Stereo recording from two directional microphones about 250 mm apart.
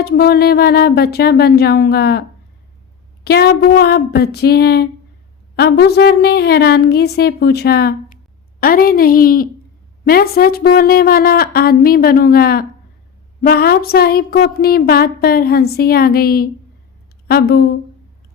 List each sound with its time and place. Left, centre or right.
0.0 s a woman's voice: left
3.2 s a woman's voice: left